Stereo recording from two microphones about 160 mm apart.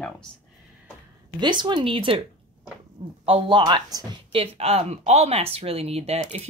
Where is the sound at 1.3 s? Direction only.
25° right (ahead or behind).